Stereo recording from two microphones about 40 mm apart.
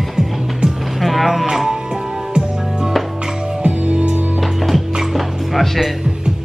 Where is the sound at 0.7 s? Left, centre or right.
Centre.